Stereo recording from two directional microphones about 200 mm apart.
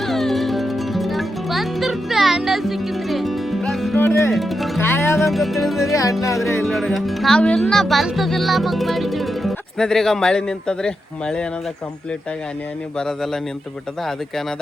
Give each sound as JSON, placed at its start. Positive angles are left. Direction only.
{"t": 0.0, "sound": "music", "side_deg": 0}
{"t": 4.3, "sound": "speech", "side_deg": 0}
{"t": 4.8, "sound": "music", "side_deg": 10}
{"t": 5.1, "sound": "speech", "side_deg": 0}
{"t": 5.9, "sound": "music", "side_deg": 15}
{"t": 6.7, "sound": "speech", "side_deg": 0}
{"t": 13.0, "sound": "speech", "side_deg": 5}